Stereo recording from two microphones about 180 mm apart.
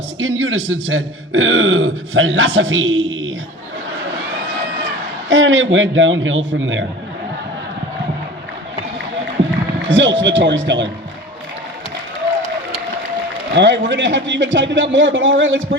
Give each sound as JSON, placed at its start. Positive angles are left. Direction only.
{"t": 0.2, "sound": "a man's voice", "side_deg": -90}
{"t": 5.3, "sound": "a man's voice", "side_deg": -90}
{"t": 9.9, "sound": "a man's voice", "side_deg": -90}
{"t": 13.5, "sound": "a man's voice", "side_deg": -80}